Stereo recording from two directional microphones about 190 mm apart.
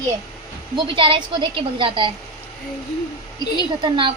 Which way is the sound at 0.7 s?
25° right (ahead or behind).